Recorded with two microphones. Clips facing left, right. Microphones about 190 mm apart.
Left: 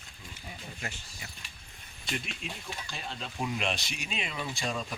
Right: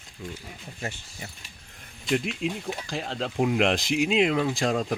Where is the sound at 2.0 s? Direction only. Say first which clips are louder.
Right 12 dB; 90° right.